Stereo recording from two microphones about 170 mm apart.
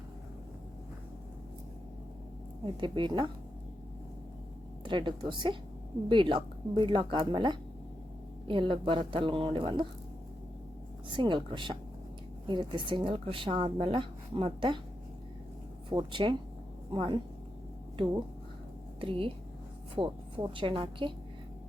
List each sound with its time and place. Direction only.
2.8 s speech: 25° right (ahead or behind)
4.9 s speech: 30° right (ahead or behind)
11.2 s speech: 30° right (ahead or behind)
15.9 s speech: 25° right (ahead or behind)
18.9 s speech: 30° right (ahead or behind)